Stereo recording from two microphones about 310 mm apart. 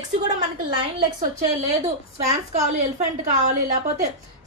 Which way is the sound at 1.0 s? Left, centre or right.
Centre.